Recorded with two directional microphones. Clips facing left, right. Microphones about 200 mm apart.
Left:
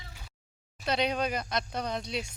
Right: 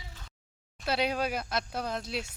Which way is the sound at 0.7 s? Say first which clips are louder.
Left 1 dB; 5° right (ahead or behind).